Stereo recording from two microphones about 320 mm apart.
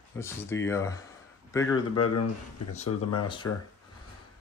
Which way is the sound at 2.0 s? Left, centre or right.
Left.